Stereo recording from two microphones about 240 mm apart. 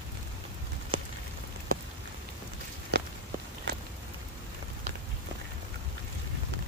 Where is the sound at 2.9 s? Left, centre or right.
Right.